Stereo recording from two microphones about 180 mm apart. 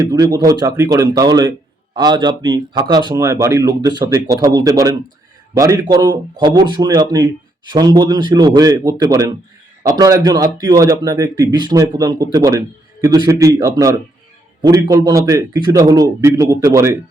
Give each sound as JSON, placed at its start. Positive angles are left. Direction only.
{"t": 0.1, "sound": "speech", "side_deg": -20}